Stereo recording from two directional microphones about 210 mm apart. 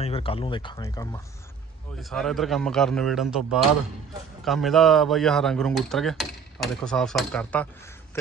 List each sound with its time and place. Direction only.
0.0 s speech: 25° left (ahead or behind)
2.0 s speech: centre (ahead or behind)
4.5 s speech: centre (ahead or behind)